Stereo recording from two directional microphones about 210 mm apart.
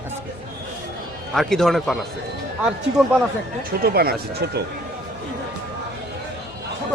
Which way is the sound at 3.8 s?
45° right (ahead or behind).